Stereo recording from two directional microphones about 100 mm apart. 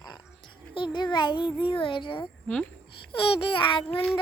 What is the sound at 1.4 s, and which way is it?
Child singing, 15° right (ahead or behind).